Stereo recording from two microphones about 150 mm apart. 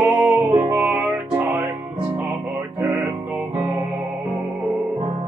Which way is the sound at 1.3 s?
15° right (ahead or behind).